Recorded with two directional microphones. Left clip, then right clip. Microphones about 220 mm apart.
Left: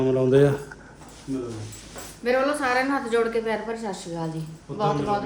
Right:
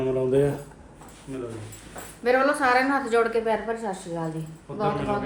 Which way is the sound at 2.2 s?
Centre (ahead or behind).